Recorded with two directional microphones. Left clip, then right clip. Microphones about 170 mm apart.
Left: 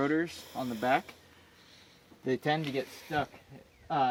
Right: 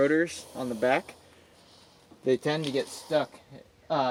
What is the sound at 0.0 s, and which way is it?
Speech, 30° left (ahead or behind).